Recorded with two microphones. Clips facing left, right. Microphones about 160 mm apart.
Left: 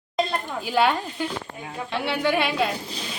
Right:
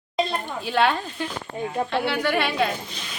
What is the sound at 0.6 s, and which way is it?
Speech, 10° left (ahead or behind).